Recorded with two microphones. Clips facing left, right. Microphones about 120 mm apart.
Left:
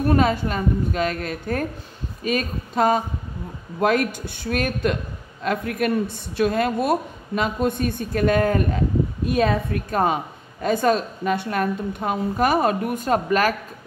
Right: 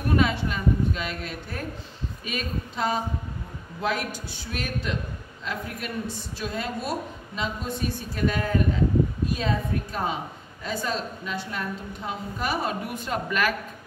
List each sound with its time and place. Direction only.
0.1 s a woman's voice: 45° left (ahead or behind)